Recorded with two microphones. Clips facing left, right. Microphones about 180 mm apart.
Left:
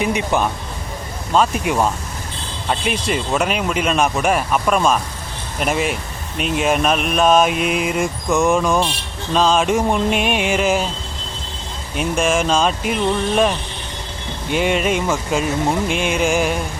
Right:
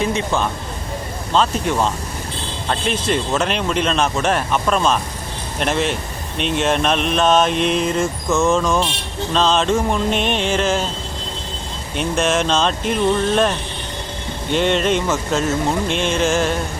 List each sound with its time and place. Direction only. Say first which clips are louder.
0.0 s speech: left 1 dB; 15° left (ahead or behind)
11.9 s speech: even; 10° left (ahead or behind)
14.5 s speech: right 1 dB; 5° left (ahead or behind)